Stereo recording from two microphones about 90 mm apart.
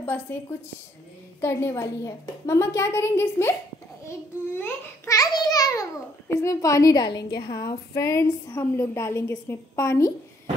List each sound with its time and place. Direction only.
0.0 s a woman's voice: 25° left (ahead or behind)
5.0 s a woman's voice: 40° left (ahead or behind)